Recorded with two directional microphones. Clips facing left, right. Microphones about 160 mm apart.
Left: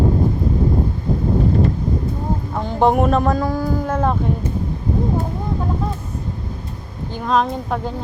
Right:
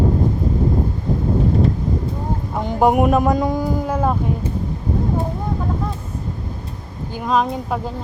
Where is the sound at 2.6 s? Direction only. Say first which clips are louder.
Right 1 dB; 10° right (ahead or behind).